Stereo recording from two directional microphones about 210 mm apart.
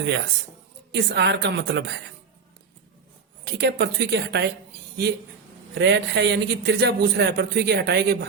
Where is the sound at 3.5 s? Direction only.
50° right (ahead or behind).